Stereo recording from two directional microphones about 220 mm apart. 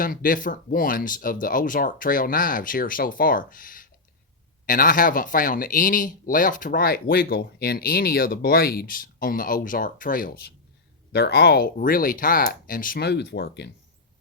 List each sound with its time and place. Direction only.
0.0 s speech: 40° left (ahead or behind)